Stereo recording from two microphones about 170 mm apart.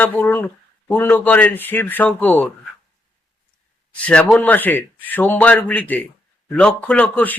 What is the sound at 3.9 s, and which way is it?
A man's voice, 5° left (ahead or behind).